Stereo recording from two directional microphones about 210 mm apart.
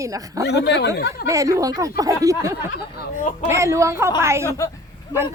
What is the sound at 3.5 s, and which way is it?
Speech, 15° right (ahead or behind).